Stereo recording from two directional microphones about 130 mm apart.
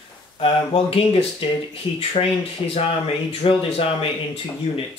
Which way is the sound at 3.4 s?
45° left (ahead or behind).